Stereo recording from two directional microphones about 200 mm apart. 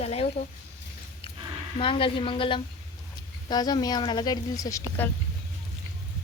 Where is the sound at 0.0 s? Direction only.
30° left (ahead or behind).